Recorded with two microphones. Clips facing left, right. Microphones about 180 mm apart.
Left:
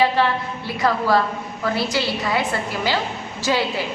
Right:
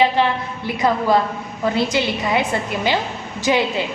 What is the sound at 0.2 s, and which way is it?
A woman's voice, 20° right (ahead or behind).